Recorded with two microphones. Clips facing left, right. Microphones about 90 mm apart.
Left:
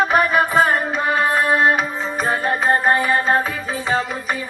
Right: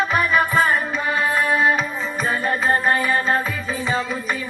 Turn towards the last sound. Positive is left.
turn(degrees=35)  # may be behind; listen again after turning